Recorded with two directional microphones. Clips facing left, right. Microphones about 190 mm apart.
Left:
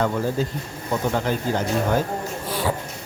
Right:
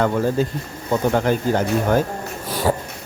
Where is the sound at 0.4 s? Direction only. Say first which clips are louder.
Right 4 dB; 55° right (ahead or behind).